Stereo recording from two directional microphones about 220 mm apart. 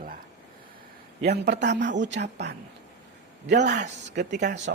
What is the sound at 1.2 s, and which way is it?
Speech, 50° right (ahead or behind).